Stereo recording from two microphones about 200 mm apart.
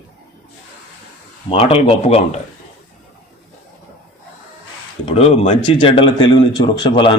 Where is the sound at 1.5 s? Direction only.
30° left (ahead or behind).